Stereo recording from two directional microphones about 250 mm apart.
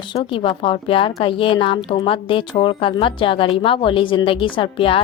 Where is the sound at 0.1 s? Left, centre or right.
Centre.